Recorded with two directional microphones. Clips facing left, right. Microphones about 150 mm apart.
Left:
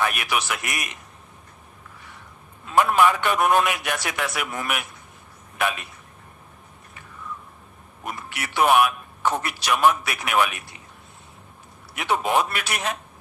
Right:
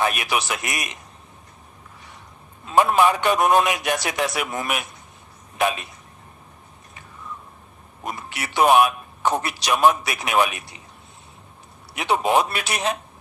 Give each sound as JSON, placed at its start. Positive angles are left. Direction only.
{"t": 0.0, "sound": "a man's voice", "side_deg": -25}
{"t": 2.9, "sound": "a man's voice", "side_deg": -20}
{"t": 8.0, "sound": "a man's voice", "side_deg": -20}
{"t": 11.9, "sound": "a man's voice", "side_deg": -20}